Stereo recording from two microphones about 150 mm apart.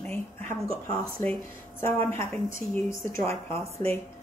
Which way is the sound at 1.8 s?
15° left (ahead or behind).